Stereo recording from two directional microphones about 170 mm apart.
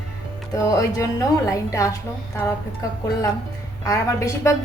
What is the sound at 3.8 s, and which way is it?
Speech, 20° left (ahead or behind).